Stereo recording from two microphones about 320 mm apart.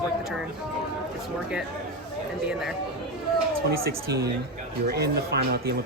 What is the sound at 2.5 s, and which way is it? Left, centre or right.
Speech, centre.